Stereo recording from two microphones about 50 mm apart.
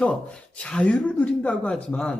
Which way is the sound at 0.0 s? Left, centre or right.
Left.